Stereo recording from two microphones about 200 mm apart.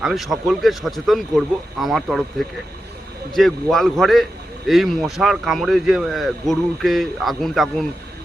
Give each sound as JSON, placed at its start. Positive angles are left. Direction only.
{"t": 0.0, "sound": "speech", "side_deg": 0}
{"t": 3.3, "sound": "speech", "side_deg": 0}